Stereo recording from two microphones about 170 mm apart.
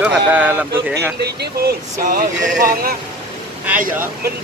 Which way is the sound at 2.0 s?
55° right (ahead or behind).